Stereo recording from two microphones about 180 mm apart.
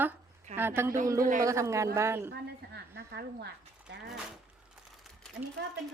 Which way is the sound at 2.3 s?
65° right (ahead or behind).